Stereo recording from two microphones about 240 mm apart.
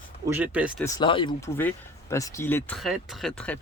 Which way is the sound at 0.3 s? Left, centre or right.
Centre.